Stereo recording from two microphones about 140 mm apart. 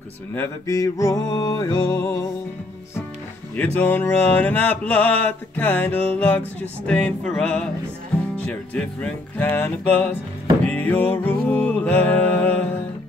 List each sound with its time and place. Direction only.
0.3 s music: 20° left (ahead or behind)
3.5 s mantra: 10° left (ahead or behind)
10.6 s music: 10° left (ahead or behind)